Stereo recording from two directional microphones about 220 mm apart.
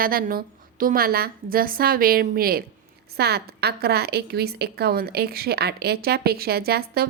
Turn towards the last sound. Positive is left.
turn(degrees=-45)  # may be behind; listen again after turning